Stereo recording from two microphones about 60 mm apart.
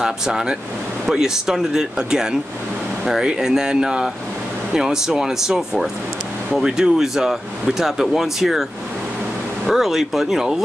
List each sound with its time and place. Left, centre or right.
0.0 s speech: centre
9.7 s speech: centre